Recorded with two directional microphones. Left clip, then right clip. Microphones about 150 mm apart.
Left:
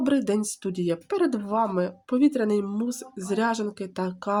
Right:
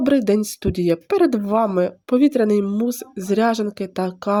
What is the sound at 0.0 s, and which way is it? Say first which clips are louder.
Speech: right 7 dB; 35° right (ahead or behind).